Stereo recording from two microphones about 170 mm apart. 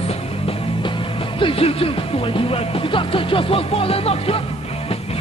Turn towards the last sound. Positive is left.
turn(degrees=35)  # may be behind; listen again after turning